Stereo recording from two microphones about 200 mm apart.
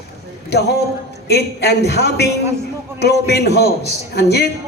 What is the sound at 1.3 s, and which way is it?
A man's voice, 55° left (ahead or behind).